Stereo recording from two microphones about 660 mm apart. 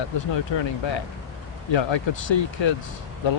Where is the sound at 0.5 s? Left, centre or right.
Left.